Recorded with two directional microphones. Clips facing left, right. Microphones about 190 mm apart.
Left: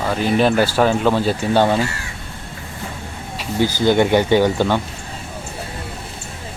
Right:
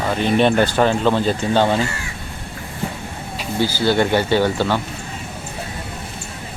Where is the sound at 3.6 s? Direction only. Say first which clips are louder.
Left 2 dB; 15° left (ahead or behind).